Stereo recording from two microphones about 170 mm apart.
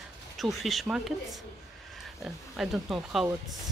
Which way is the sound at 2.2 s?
Centre (ahead or behind).